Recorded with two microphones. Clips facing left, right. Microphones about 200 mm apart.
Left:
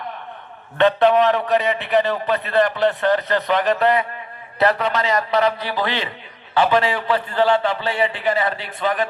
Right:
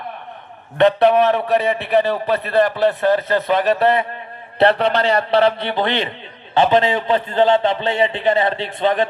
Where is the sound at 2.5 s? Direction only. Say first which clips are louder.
Right 2 dB; 20° right (ahead or behind).